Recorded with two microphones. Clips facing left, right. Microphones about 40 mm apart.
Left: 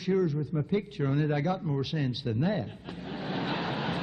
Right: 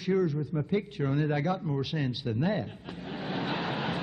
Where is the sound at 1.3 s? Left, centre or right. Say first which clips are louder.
Even; centre.